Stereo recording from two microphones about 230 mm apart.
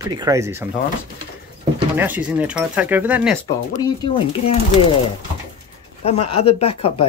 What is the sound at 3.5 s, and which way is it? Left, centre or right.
Speech, centre.